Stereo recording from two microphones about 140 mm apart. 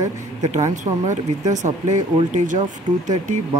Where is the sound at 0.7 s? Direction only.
60° right (ahead or behind).